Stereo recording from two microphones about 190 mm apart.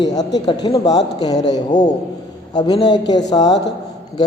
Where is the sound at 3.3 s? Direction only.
20° left (ahead or behind).